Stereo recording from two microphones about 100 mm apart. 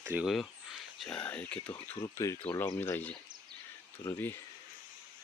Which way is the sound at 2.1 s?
30° left (ahead or behind).